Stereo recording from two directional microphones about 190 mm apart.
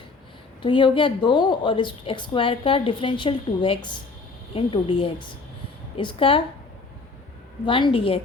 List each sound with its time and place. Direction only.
0.6 s a woman's voice: 25° left (ahead or behind)
7.6 s a woman's voice: 25° left (ahead or behind)